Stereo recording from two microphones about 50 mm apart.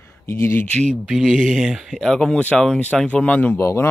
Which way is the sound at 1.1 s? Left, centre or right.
Centre.